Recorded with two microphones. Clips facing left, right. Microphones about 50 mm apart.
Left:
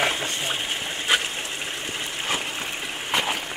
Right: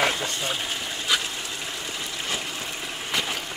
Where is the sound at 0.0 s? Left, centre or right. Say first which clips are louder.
Even; left.